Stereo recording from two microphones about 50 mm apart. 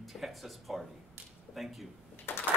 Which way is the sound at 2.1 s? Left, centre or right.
Left.